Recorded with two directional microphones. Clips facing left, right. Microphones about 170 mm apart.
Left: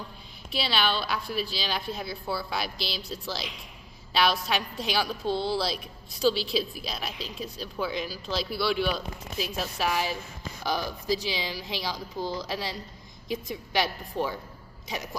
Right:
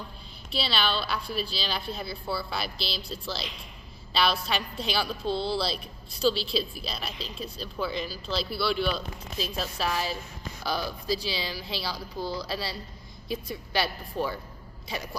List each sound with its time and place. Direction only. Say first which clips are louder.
0.5 s speech: left 1 dB; 15° left (ahead or behind)
7.5 s speech: even; 15° left (ahead or behind)
14.8 s a sound: even; 15° left (ahead or behind)